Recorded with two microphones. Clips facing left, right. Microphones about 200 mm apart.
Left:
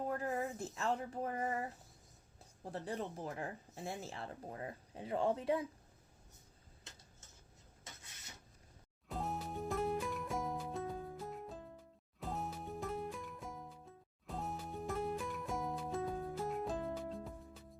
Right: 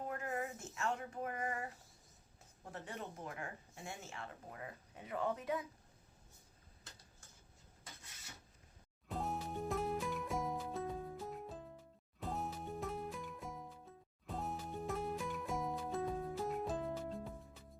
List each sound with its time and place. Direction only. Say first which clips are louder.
0.0 s speech: left 3 dB; 35° left (ahead or behind)
6.8 s tick-tock: left 1 dB; 20° left (ahead or behind)
9.0 s music: even; centre (ahead or behind)